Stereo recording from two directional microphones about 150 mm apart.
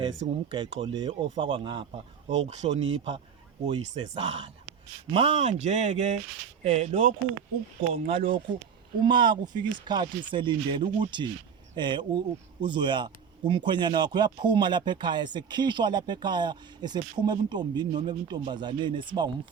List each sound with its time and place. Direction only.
0.2 s speech: 40° right (ahead or behind)